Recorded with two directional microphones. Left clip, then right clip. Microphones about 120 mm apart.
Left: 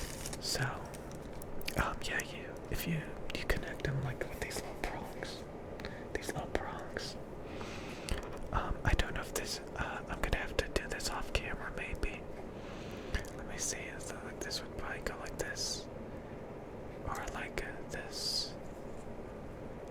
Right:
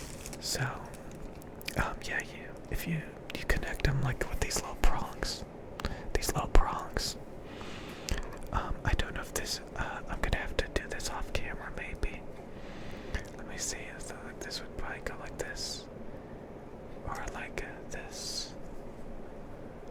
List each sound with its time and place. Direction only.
0.4 s speech: 15° right (ahead or behind)
1.6 s whispering: 10° right (ahead or behind)
3.6 s whispering: 40° right (ahead or behind); by 5.0 s 65° right (ahead or behind)
5.8 s whispering: 55° right (ahead or behind)
8.0 s whispering: 10° right (ahead or behind)
9.3 s whispering: 15° right (ahead or behind)
13.1 s whispering: 15° right (ahead or behind)
14.4 s speech: 10° right (ahead or behind)
17.1 s speech: 10° right (ahead or behind)